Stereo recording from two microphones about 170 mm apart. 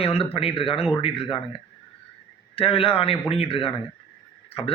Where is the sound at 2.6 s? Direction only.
35° left (ahead or behind).